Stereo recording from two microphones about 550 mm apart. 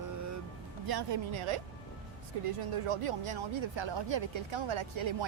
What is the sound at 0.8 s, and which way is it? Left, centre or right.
Speech, right.